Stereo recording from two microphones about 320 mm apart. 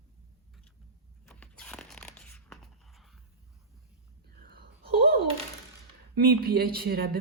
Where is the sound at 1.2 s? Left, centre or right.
Centre.